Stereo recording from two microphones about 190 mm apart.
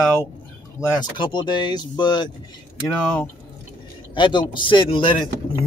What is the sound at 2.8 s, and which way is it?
Speech, 5° left (ahead or behind).